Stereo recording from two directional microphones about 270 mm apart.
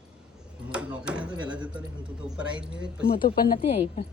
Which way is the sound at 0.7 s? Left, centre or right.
Centre.